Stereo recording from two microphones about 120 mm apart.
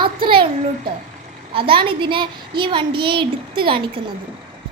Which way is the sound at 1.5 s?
45° right (ahead or behind).